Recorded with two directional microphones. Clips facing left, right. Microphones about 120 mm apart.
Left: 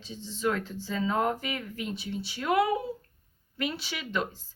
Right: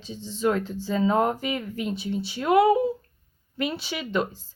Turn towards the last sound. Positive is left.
turn(degrees=-20)  # may be behind; listen again after turning